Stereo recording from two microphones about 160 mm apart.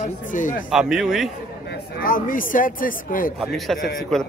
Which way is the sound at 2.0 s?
60° left (ahead or behind).